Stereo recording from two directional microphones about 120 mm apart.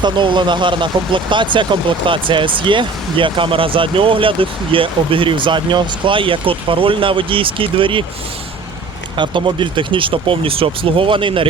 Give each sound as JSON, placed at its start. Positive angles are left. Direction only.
{"t": 0.0, "sound": "speech", "side_deg": -40}
{"t": 9.1, "sound": "speech", "side_deg": -40}